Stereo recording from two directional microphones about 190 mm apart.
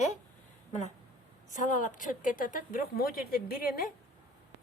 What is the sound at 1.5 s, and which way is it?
A woman's voice, 40° left (ahead or behind).